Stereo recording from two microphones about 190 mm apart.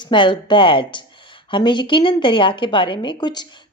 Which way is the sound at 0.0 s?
25° left (ahead or behind).